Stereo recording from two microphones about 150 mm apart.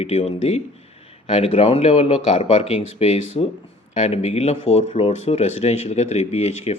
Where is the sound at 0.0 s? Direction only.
45° left (ahead or behind).